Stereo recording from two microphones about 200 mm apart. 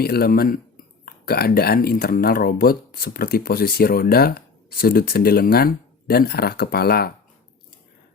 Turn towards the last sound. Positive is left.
turn(degrees=50)  # may be behind; listen again after turning